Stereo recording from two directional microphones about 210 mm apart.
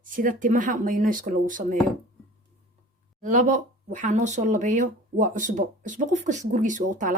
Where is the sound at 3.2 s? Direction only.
35° right (ahead or behind).